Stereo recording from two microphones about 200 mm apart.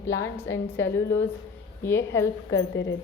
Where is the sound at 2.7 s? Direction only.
70° left (ahead or behind).